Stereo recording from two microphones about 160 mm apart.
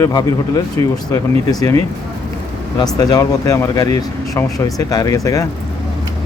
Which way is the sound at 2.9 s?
20° left (ahead or behind).